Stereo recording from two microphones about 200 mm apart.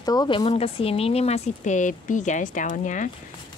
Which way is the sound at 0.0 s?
20° left (ahead or behind).